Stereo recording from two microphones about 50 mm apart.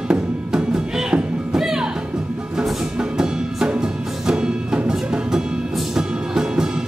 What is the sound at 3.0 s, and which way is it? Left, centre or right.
Music, centre.